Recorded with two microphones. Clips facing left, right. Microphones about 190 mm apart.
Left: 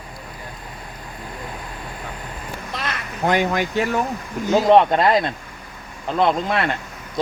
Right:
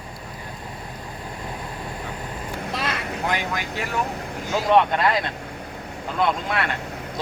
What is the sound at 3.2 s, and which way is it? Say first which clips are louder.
Speech: left 9 dB; 50° left (ahead or behind).